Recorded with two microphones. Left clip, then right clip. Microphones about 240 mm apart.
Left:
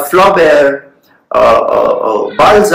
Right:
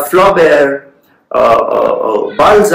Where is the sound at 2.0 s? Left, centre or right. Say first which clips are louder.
Left 1 dB; centre.